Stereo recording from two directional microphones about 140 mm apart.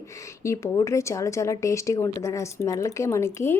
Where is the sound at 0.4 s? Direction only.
20° left (ahead or behind).